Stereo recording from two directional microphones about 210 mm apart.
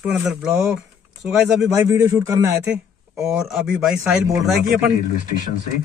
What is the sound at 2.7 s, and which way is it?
A man's voice, 5° right (ahead or behind).